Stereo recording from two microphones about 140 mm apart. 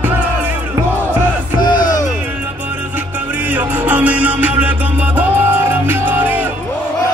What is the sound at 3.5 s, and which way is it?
Music, 15° right (ahead or behind).